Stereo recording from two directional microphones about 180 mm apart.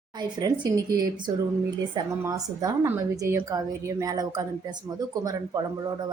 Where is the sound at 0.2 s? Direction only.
25° right (ahead or behind).